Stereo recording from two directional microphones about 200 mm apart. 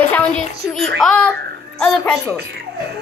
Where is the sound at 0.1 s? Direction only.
5° left (ahead or behind).